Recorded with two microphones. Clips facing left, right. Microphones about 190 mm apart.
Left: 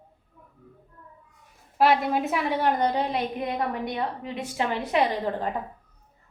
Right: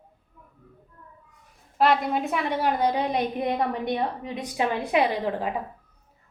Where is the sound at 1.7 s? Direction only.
Centre (ahead or behind).